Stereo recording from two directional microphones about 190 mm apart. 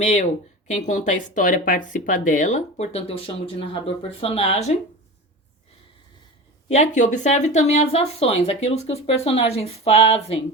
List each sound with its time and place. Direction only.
0.0 s speech: 40° left (ahead or behind)
6.7 s speech: 40° left (ahead or behind)